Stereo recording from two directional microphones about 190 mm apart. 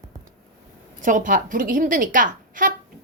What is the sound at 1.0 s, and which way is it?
A woman's voice, 45° right (ahead or behind).